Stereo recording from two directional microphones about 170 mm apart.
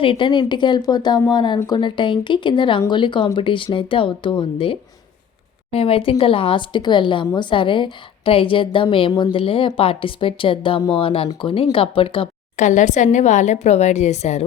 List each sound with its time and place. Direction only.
0.0 s a woman's voice: 30° left (ahead or behind)
12.6 s a woman's voice: 45° left (ahead or behind)